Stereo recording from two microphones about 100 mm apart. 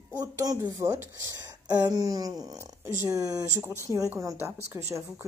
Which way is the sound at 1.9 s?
40° right (ahead or behind).